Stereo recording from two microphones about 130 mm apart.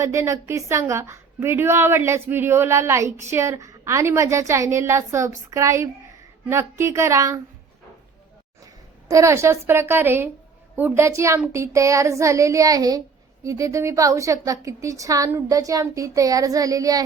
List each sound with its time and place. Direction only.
0.0 s a woman's voice: 25° right (ahead or behind)
8.6 s a woman's voice: 25° right (ahead or behind)